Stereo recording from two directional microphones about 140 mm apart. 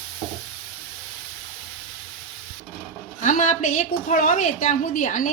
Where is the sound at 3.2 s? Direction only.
60° left (ahead or behind).